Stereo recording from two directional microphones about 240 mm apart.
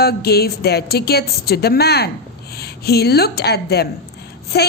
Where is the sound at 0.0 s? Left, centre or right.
Left.